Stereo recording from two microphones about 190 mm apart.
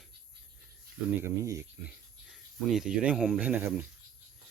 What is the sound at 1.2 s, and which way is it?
Speech, 15° right (ahead or behind).